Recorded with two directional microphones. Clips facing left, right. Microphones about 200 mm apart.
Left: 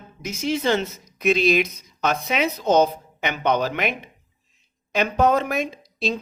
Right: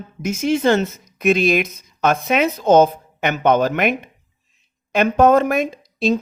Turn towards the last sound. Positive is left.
turn(degrees=-50)  # may be behind; listen again after turning